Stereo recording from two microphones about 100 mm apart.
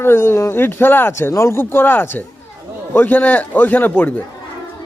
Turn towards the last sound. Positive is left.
turn(degrees=15)  # may be behind; listen again after turning